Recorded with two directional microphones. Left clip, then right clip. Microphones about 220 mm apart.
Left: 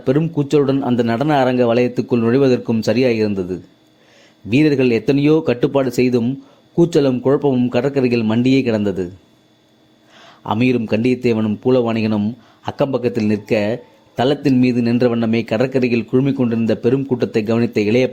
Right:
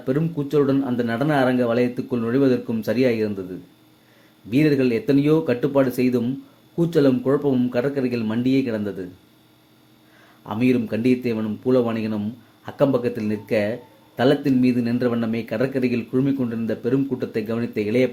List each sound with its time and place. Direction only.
0.0 s a man's voice: 35° left (ahead or behind)
10.2 s a man's voice: 40° left (ahead or behind)